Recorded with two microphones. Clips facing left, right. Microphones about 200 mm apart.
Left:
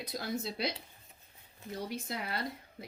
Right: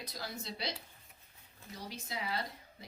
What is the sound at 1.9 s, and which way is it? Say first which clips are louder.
Speech: right 1 dB; 55° left (ahead or behind).